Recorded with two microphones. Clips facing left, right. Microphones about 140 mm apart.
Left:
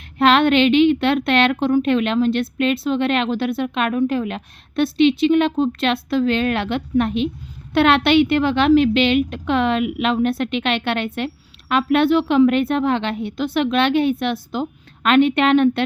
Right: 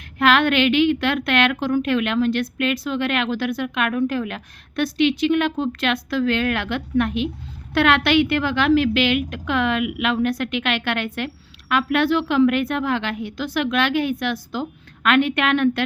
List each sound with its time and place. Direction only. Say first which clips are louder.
0.2 s a woman's voice: left 3 dB; 25° left (ahead or behind)